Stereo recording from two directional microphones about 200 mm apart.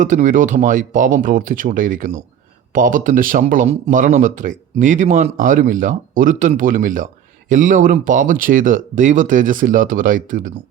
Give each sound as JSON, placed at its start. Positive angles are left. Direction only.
{"t": 0.0, "sound": "speech", "side_deg": -40}